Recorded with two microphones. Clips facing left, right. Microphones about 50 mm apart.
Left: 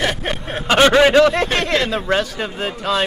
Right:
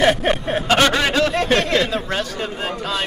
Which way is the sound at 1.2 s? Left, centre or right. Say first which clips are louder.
Left 2 dB; centre.